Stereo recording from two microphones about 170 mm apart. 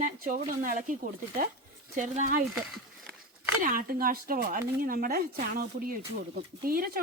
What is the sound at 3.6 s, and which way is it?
Speech, 55° right (ahead or behind).